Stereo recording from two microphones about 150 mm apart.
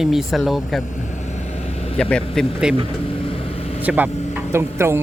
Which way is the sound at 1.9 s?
5° left (ahead or behind).